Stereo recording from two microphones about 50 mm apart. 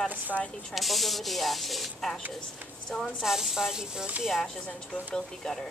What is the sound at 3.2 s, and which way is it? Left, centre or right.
Speech, centre.